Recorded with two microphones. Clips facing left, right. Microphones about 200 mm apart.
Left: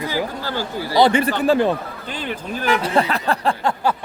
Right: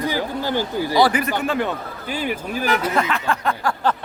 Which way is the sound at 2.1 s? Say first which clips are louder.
Right 3 dB; 10° right (ahead or behind).